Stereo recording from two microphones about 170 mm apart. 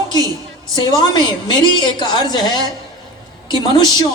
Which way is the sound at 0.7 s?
25° left (ahead or behind).